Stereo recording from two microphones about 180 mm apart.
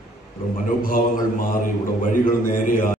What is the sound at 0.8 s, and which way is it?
Mantra, 50° left (ahead or behind).